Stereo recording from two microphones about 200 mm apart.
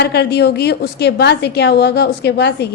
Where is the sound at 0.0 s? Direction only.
55° left (ahead or behind).